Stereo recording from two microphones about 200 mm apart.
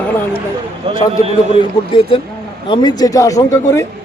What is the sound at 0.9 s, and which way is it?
Speech, 30° right (ahead or behind).